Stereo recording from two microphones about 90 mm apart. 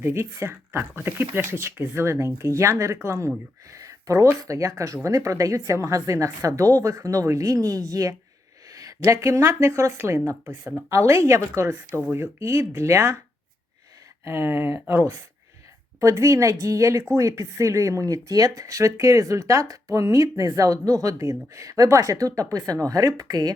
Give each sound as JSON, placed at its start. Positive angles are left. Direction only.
{"t": 0.0, "sound": "speech", "side_deg": -30}
{"t": 14.3, "sound": "speech", "side_deg": -25}